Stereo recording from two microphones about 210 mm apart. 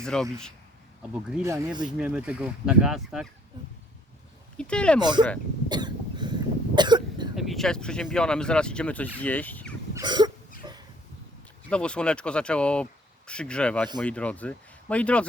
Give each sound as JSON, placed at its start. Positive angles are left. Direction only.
{"t": 0.0, "sound": "speech", "side_deg": 5}
{"t": 1.1, "sound": "speech", "side_deg": -10}
{"t": 2.0, "sound": "speech", "side_deg": -5}
{"t": 4.5, "sound": "speech", "side_deg": 5}
{"t": 4.9, "sound": "speech", "side_deg": -20}
{"t": 5.6, "sound": "cough", "side_deg": -20}
{"t": 7.3, "sound": "speech", "side_deg": 0}
{"t": 9.9, "sound": "cough", "side_deg": -20}
{"t": 10.6, "sound": "a sound", "side_deg": -20}
{"t": 11.7, "sound": "speech", "side_deg": 5}